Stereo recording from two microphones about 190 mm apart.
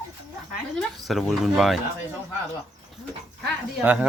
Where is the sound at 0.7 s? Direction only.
Centre (ahead or behind).